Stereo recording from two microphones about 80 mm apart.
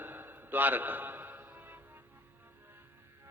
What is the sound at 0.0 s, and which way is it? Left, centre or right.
Music, right.